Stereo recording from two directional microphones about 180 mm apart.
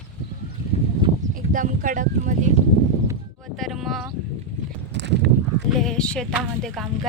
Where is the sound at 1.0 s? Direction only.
25° right (ahead or behind).